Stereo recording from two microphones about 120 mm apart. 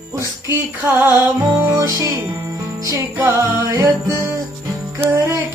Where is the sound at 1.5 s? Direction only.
30° right (ahead or behind).